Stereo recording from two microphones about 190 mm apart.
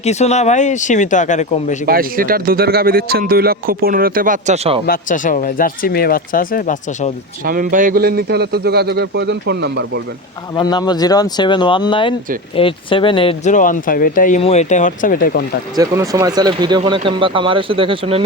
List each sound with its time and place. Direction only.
0.0 s speech: 35° left (ahead or behind)
1.9 s speech: 50° right (ahead or behind); by 4.8 s 35° right (ahead or behind)
4.9 s speech: 45° left (ahead or behind)
7.4 s a man's voice: 45° right (ahead or behind); by 10.0 s 65° right (ahead or behind)
10.5 s speech: 20° left (ahead or behind)
13.5 s speech: 45° left (ahead or behind)
15.7 s speech: 20° right (ahead or behind)